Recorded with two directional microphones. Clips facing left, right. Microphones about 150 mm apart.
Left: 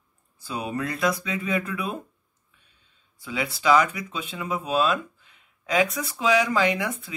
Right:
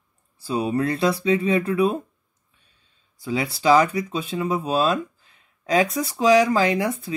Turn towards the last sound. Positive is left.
turn(degrees=-35)  # may be behind; listen again after turning